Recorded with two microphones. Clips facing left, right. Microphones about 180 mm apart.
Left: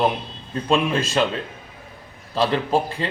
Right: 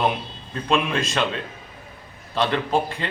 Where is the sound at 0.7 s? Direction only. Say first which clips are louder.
Left 2 dB; 35° left (ahead or behind).